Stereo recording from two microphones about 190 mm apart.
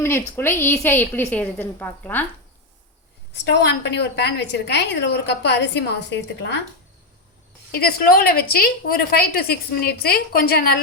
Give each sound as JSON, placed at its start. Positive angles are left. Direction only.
{"t": 0.0, "sound": "a woman's voice", "side_deg": 15}
{"t": 3.3, "sound": "a woman's voice", "side_deg": 65}
{"t": 7.7, "sound": "a woman's voice", "side_deg": 50}